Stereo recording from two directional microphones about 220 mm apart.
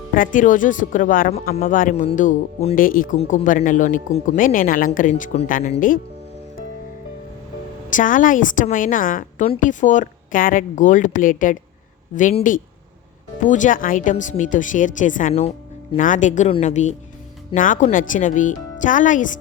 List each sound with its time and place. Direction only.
0.1 s speech: 40° left (ahead or behind)
7.9 s speech: 35° left (ahead or behind)